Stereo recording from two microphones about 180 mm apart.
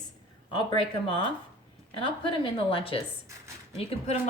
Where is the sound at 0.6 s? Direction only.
25° left (ahead or behind).